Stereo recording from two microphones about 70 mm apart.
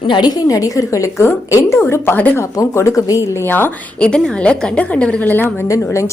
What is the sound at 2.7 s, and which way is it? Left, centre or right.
Speech, left.